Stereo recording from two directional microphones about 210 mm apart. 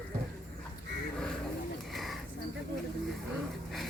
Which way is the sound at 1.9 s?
Centre (ahead or behind).